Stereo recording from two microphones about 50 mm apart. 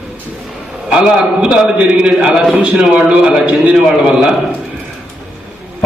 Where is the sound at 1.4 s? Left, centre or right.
Centre.